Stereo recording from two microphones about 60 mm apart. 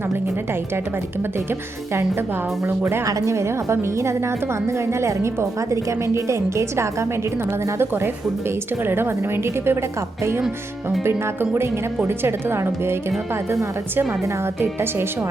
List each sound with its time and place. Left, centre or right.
1.5 s a woman's voice: right
3.1 s a woman's voice: right
7.8 s a woman's voice: right
11.0 s a woman's voice: right